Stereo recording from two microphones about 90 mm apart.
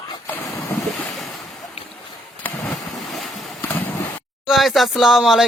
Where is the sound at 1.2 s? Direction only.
Centre (ahead or behind).